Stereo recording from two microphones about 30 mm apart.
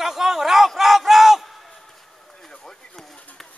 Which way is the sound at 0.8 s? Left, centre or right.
Centre.